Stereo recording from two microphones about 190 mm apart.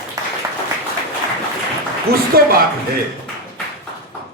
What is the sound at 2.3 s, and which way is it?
Speech, 55° right (ahead or behind).